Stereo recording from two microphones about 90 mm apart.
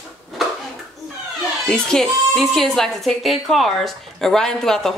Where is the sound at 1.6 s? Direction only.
5° left (ahead or behind).